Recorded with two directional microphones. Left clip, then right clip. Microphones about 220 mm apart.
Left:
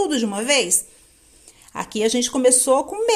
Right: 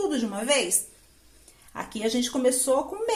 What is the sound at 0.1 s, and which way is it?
A woman's voice, 45° left (ahead or behind).